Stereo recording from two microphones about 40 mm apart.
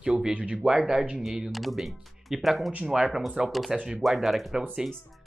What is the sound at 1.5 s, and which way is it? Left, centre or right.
Speech, centre.